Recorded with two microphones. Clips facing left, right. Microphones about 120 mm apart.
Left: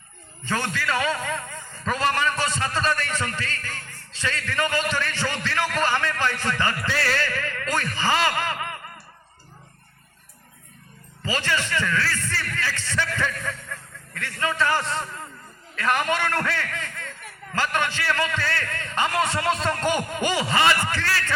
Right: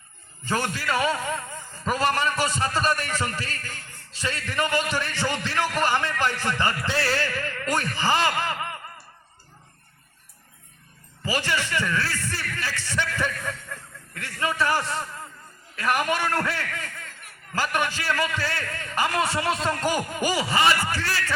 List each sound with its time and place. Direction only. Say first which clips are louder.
0.5 s a man's voice: even; 15° right (ahead or behind)
11.3 s a man's voice: even; 15° right (ahead or behind)